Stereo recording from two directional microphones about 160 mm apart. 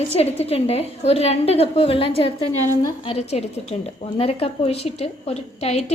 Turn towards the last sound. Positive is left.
turn(degrees=40)  # may be behind; listen again after turning